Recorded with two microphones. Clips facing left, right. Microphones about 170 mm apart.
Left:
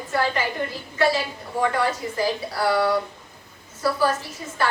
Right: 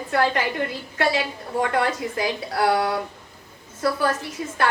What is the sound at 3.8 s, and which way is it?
Speech, 55° right (ahead or behind).